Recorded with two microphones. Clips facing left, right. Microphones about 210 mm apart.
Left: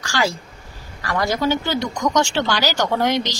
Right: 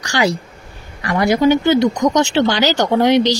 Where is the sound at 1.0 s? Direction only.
15° right (ahead or behind).